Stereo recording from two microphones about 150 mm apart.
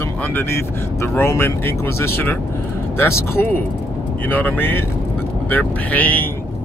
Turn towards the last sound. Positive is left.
turn(degrees=10)  # may be behind; listen again after turning